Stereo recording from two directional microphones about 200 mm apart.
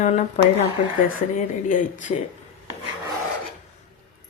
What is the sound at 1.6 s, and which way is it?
Speech, 40° left (ahead or behind).